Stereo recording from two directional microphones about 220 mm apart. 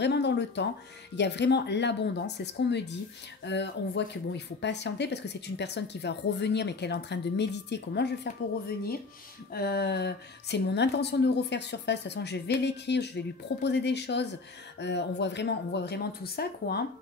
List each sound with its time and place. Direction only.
0.0 s speech: 50° left (ahead or behind)